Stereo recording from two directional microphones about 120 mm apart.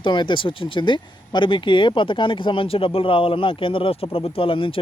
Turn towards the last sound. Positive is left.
turn(degrees=45)  # may be behind; listen again after turning